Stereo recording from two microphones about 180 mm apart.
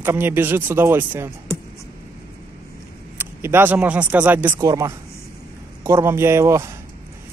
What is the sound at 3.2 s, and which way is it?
Speech, 15° right (ahead or behind).